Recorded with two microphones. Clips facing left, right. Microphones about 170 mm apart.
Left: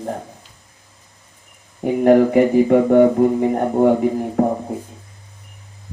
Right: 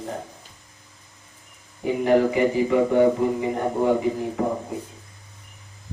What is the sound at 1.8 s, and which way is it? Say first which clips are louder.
Speech: left 6 dB; 50° left (ahead or behind).